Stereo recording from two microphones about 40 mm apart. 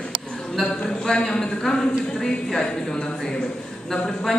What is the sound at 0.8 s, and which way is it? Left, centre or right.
A woman's voice, centre.